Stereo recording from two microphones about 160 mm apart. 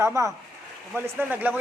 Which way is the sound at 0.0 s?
20° right (ahead or behind).